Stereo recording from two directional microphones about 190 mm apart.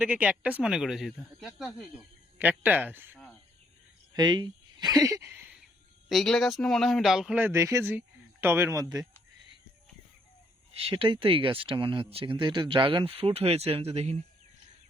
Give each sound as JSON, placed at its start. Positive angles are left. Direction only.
{"t": 0.0, "sound": "a man's voice", "side_deg": -5}
{"t": 4.1, "sound": "speech", "side_deg": -25}
{"t": 6.1, "sound": "a man's voice", "side_deg": 0}
{"t": 10.8, "sound": "speech", "side_deg": -30}